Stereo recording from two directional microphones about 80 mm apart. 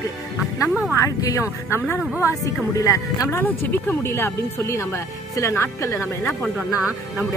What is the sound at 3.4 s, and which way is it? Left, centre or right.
Speech, left.